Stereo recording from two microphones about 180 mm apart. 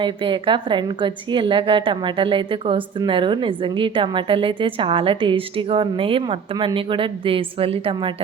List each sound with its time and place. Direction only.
0.0 s a woman's voice: 30° right (ahead or behind)